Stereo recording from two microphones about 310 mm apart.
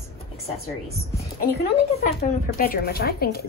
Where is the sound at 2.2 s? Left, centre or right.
Left.